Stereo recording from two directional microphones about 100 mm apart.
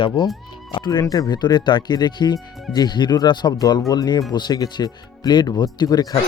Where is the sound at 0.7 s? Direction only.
50° left (ahead or behind).